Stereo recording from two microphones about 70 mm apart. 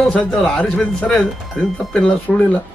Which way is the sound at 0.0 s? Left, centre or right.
Centre.